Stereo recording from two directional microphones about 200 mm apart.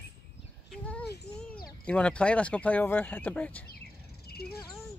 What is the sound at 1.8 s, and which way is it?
Speech, 5° left (ahead or behind).